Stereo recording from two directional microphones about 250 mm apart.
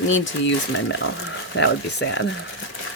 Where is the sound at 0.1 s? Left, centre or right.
Left.